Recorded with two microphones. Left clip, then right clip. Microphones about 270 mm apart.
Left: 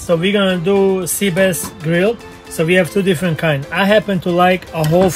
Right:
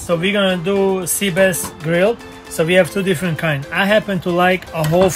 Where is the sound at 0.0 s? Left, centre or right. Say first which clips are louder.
Left 2 dB; centre.